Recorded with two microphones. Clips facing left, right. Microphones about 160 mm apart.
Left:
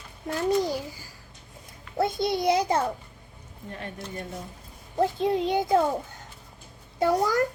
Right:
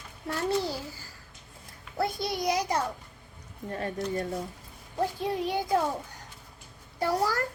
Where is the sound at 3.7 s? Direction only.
40° right (ahead or behind).